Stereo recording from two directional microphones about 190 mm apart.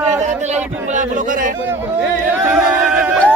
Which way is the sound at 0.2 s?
40° right (ahead or behind).